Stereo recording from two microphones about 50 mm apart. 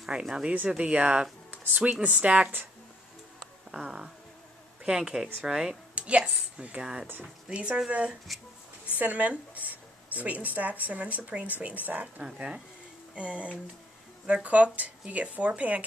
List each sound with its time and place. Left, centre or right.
0.1 s speech: centre
1.5 s a sound: right
1.8 s speech: right
3.3 s music: centre
4.8 s speech: centre
5.9 s a woman's voice: right
12.4 s speech: centre; by 15.8 s right